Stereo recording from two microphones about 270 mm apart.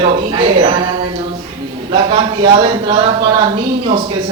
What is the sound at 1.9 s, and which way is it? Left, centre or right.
A man's voice, centre.